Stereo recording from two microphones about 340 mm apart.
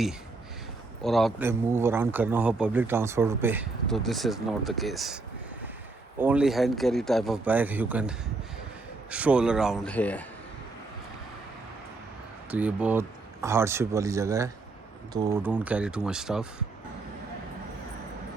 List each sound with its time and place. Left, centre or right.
1.0 s speech: centre
12.5 s speech: centre